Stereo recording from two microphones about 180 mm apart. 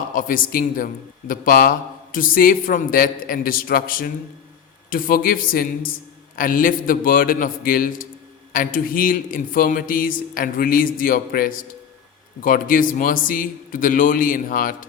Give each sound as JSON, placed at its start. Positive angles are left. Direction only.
{"t": 0.1, "sound": "speech", "side_deg": 50}